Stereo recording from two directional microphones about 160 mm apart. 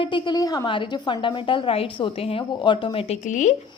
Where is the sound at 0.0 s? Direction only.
30° left (ahead or behind).